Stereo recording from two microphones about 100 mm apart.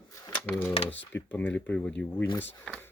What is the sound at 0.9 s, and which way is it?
Speech, 15° left (ahead or behind).